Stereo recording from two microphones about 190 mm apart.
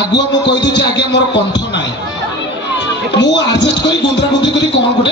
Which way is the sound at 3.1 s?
70° left (ahead or behind).